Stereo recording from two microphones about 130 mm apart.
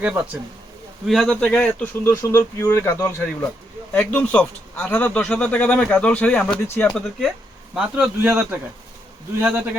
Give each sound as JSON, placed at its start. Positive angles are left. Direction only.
{"t": 0.0, "sound": "a man's voice", "side_deg": -10}
{"t": 7.8, "sound": "speech", "side_deg": -5}